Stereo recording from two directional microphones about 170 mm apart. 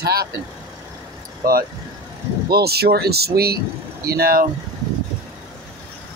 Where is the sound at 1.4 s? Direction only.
60° right (ahead or behind).